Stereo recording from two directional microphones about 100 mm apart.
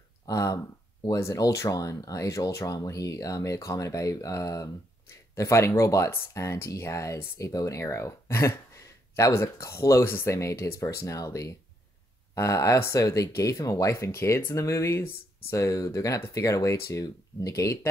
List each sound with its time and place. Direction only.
0.3 s speech: 35° left (ahead or behind)